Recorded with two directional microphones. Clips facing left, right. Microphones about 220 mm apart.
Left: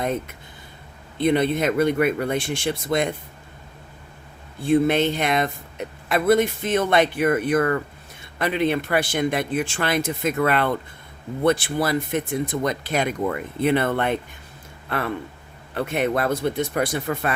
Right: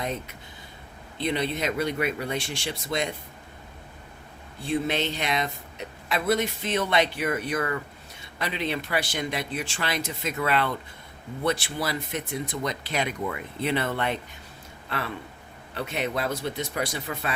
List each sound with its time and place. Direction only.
1.2 s speech: 50° left (ahead or behind)
4.6 s speech: 55° left (ahead or behind)